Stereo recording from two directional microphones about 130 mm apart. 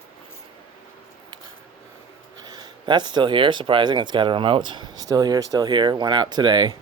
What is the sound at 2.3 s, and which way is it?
Speech, 35° right (ahead or behind).